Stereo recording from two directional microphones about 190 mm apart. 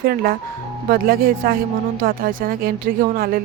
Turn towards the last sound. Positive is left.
turn(degrees=-50)  # may be behind; listen again after turning